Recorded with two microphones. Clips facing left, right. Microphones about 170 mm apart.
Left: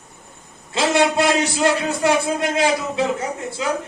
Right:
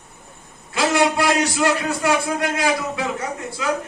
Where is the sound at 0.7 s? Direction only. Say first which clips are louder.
Left 1 dB; 25° left (ahead or behind).